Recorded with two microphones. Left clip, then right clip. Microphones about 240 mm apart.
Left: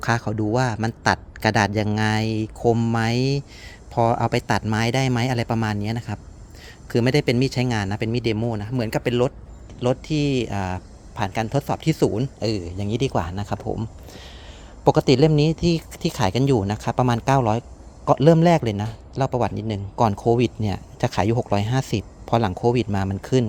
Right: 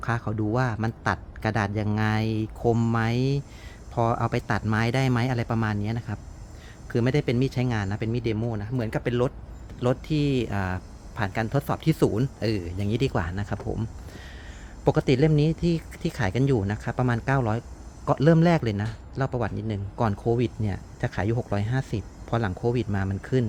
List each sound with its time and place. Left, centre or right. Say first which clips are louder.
0.0 s speech: left 6 dB; left
9.8 s speech: left 3 dB; centre